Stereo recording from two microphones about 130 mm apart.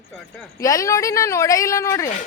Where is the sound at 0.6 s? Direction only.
25° left (ahead or behind).